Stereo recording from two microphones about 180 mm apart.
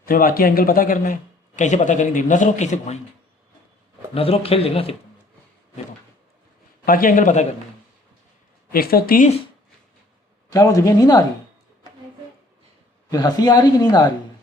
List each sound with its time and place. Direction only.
0.0 s speech: 55° left (ahead or behind)
4.1 s speech: 30° left (ahead or behind)
6.8 s speech: 50° left (ahead or behind)
8.7 s a woman's voice: 55° left (ahead or behind)
10.5 s speech: 20° left (ahead or behind)
13.1 s speech: 20° left (ahead or behind)